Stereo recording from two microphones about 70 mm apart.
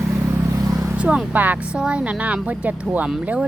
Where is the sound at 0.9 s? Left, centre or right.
Centre.